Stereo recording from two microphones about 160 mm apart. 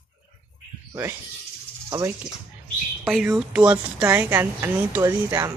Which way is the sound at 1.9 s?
20° right (ahead or behind).